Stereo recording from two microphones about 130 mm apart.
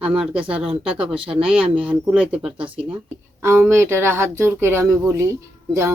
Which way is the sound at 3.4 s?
20° right (ahead or behind).